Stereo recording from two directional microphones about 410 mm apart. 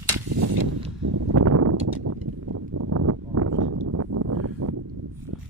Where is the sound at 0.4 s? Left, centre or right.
Right.